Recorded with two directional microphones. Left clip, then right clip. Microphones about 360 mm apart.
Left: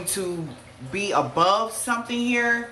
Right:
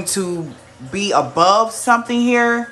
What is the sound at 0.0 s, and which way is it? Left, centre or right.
Speech, centre.